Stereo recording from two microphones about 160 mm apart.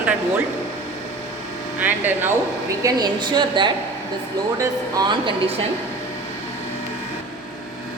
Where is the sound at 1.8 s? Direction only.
10° right (ahead or behind).